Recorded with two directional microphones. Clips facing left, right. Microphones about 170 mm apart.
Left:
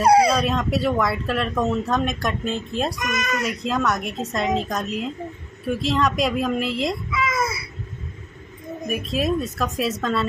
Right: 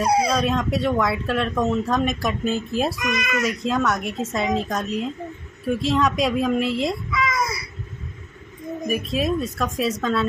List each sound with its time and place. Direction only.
0.0 s speech: 65° left (ahead or behind)
0.3 s speech: centre (ahead or behind)
3.0 s a child's voice: 45° left (ahead or behind)
3.4 s speech: centre (ahead or behind)
8.8 s speech: centre (ahead or behind)